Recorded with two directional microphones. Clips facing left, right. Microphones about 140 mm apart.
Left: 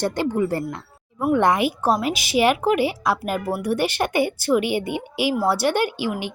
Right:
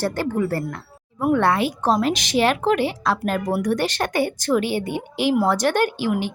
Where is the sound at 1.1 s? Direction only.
5° left (ahead or behind).